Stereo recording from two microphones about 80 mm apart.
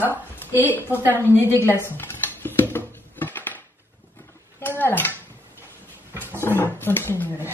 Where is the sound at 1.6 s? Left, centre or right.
Left.